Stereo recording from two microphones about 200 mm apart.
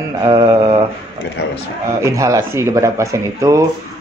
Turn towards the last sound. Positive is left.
turn(degrees=-15)  # may be behind; listen again after turning